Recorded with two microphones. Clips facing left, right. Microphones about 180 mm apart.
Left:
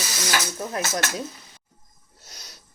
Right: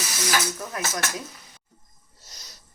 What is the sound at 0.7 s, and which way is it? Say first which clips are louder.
Speech: left 3 dB; 30° left (ahead or behind).